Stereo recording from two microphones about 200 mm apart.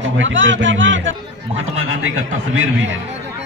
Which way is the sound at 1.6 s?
85° right.